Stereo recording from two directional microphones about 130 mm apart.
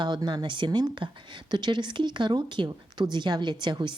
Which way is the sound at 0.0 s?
35° right (ahead or behind).